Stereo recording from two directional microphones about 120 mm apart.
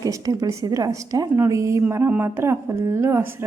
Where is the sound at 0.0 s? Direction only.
30° right (ahead or behind).